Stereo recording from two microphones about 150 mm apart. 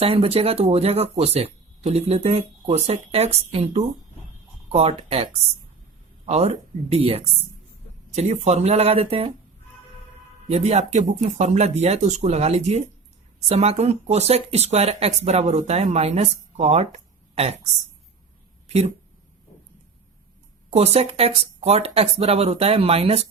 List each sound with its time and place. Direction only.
0.0 s speech: 40° right (ahead or behind)
10.5 s speech: 45° right (ahead or behind)
20.7 s speech: 45° right (ahead or behind)